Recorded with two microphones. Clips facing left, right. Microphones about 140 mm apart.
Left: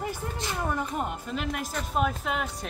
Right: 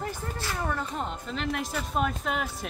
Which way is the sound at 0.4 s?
15° left (ahead or behind).